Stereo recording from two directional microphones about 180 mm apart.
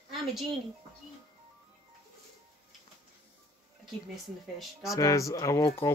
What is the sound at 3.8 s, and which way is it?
Speech, centre (ahead or behind).